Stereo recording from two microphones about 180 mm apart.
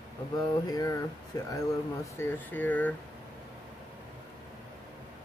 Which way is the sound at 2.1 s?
10° left (ahead or behind).